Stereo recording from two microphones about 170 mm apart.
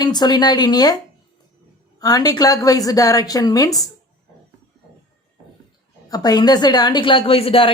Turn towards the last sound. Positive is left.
turn(degrees=35)  # may be behind; listen again after turning